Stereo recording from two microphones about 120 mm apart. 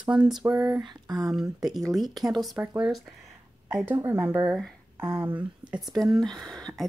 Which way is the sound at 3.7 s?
15° right (ahead or behind).